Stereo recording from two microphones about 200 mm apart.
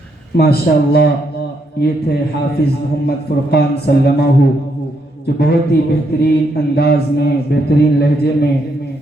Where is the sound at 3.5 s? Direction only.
55° left (ahead or behind).